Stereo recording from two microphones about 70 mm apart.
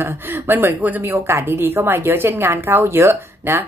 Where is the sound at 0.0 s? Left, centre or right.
Right.